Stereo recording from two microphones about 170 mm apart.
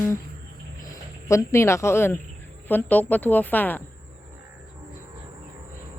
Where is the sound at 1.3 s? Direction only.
15° left (ahead or behind).